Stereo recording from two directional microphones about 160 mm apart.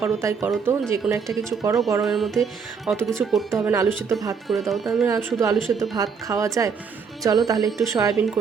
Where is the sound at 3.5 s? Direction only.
20° right (ahead or behind).